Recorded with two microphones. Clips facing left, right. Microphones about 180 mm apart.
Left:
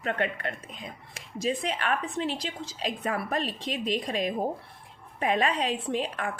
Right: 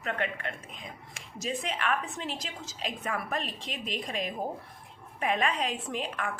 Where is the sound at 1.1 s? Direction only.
35° left (ahead or behind).